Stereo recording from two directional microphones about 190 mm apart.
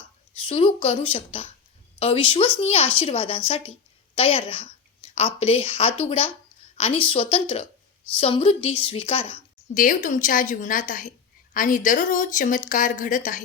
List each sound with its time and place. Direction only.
0.4 s a woman's voice: 30° left (ahead or behind)
9.7 s speech: 45° left (ahead or behind)